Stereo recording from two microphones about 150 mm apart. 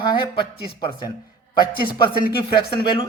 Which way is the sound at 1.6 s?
30° left (ahead or behind).